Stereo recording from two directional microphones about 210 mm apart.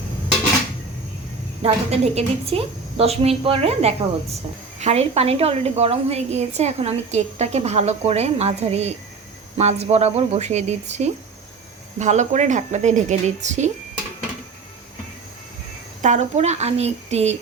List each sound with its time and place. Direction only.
1.6 s a woman's voice: 30° right (ahead or behind)
16.0 s a woman's voice: 35° right (ahead or behind)